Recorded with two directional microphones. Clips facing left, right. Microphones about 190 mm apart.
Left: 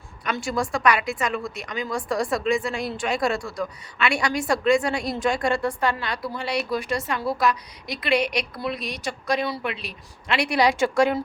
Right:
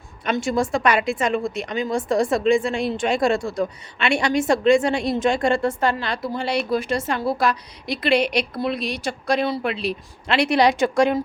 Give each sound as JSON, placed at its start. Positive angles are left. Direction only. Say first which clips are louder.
{"t": 0.3, "sound": "a woman's voice", "louder": "right 5 dB", "side_deg": -25}